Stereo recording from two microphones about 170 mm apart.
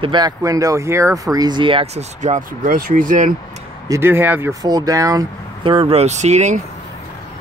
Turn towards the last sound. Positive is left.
turn(degrees=-45)  # may be behind; listen again after turning